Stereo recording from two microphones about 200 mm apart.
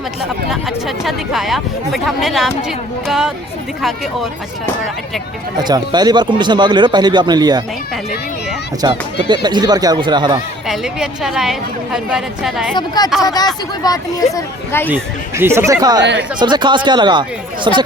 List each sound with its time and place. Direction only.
0.5 s speech: centre (ahead or behind)
5.5 s speech: 20° right (ahead or behind)
8.8 s speech: 20° right (ahead or behind)
10.7 s speech: centre (ahead or behind)
12.7 s speech: 20° left (ahead or behind)
14.8 s speech: 10° right (ahead or behind)